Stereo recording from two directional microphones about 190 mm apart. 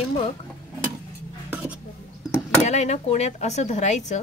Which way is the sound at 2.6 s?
35° left (ahead or behind).